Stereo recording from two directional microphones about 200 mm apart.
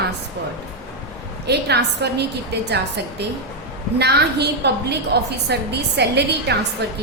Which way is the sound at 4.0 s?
55° right (ahead or behind).